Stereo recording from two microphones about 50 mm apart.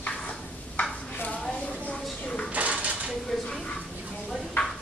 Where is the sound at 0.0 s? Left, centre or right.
Left.